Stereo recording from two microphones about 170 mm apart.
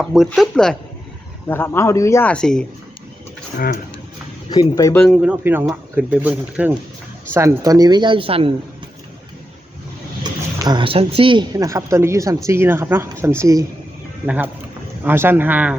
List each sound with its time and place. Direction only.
0.0 s speech: 5° right (ahead or behind)
1.5 s a man's voice: 15° left (ahead or behind)
4.4 s speech: 20° left (ahead or behind)
4.9 s speech: 5° left (ahead or behind)
5.3 s speech: 10° right (ahead or behind); by 8.5 s 30° right (ahead or behind)
10.2 s speech: 25° right (ahead or behind)